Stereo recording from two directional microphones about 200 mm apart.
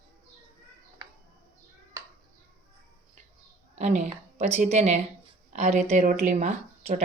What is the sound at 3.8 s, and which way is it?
Speech, 35° right (ahead or behind).